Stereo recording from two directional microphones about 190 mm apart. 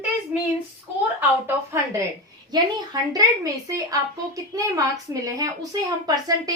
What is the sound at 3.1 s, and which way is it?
A woman's voice, 15° right (ahead or behind).